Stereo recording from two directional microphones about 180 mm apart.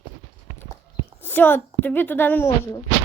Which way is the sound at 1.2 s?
10° left (ahead or behind).